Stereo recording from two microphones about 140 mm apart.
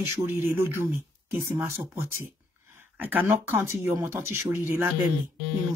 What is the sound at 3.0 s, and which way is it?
Speech, 15° right (ahead or behind).